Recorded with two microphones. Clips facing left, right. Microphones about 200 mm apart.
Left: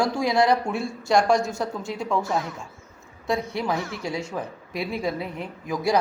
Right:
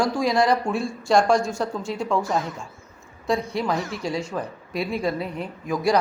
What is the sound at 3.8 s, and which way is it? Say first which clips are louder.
Speech: right 2 dB; 20° right (ahead or behind).